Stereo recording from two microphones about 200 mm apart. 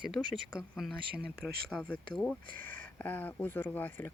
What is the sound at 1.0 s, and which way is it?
Speech, 50° right (ahead or behind).